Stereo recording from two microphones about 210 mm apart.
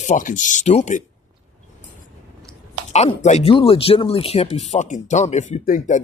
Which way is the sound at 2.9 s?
35° left (ahead or behind).